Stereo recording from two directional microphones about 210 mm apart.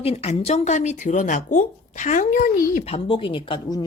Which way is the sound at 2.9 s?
25° left (ahead or behind).